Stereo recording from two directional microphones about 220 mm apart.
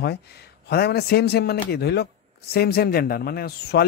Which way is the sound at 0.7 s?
45° left (ahead or behind).